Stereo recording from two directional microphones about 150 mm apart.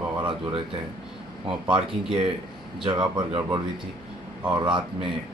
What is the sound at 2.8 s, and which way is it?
Speech, 30° right (ahead or behind).